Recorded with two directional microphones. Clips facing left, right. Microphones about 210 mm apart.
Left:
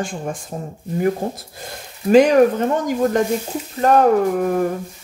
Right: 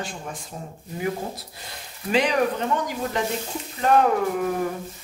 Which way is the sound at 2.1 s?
45° left (ahead or behind).